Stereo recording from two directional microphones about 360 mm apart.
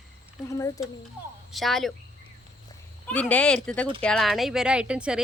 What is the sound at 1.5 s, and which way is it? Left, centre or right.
Speech, centre.